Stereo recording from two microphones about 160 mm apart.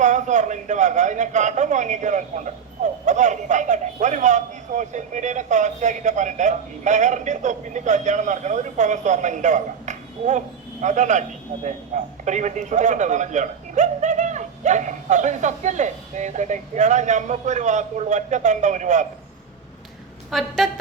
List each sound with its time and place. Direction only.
0.0 s a man's voice: 50° right (ahead or behind)
20.3 s a woman's voice: centre (ahead or behind)